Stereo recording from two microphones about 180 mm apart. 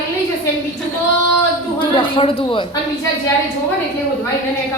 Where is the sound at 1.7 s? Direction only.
30° left (ahead or behind).